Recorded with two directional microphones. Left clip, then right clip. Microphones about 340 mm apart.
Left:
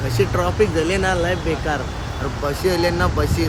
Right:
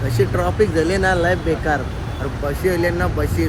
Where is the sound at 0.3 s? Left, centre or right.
Centre.